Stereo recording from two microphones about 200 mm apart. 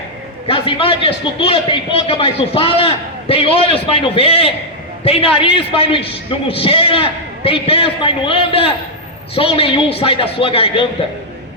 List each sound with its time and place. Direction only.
0.4 s a man's voice: 25° left (ahead or behind)